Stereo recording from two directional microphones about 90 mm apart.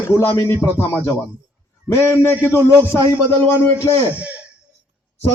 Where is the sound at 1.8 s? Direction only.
30° left (ahead or behind).